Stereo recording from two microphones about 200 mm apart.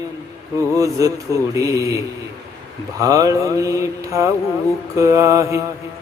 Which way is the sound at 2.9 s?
15° right (ahead or behind).